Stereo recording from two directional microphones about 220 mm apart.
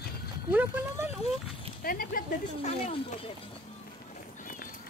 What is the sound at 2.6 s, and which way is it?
Speech, 25° left (ahead or behind).